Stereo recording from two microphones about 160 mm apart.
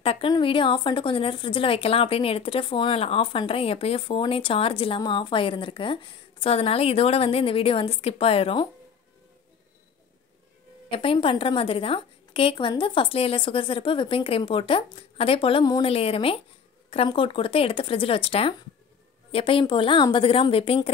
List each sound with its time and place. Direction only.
0.0 s a woman's voice: 35° left (ahead or behind)
10.9 s speech: 35° left (ahead or behind)